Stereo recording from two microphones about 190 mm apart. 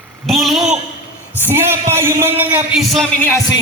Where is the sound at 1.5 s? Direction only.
10° right (ahead or behind).